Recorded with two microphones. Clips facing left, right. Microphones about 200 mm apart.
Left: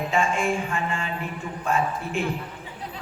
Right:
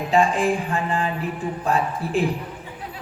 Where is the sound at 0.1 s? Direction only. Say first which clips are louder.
Right 6 dB; 35° right (ahead or behind).